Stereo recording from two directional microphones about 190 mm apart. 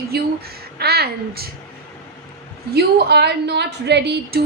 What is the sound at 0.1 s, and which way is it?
A woman's voice, 55° right (ahead or behind).